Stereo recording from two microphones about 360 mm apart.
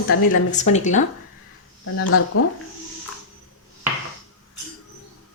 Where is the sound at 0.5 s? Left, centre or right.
Centre.